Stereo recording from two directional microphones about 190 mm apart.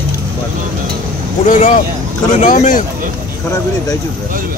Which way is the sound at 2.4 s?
40° left (ahead or behind).